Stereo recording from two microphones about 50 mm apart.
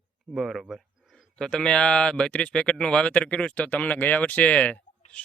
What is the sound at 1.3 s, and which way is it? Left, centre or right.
Speech, centre.